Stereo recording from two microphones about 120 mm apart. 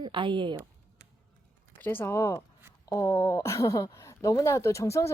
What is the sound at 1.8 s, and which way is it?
Speech, 15° left (ahead or behind).